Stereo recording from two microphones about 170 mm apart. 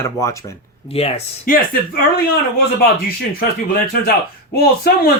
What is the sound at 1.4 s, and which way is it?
Speech, 55° left (ahead or behind).